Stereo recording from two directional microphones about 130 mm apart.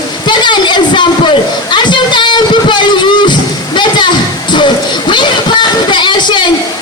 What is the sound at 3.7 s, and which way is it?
Music, 35° left (ahead or behind).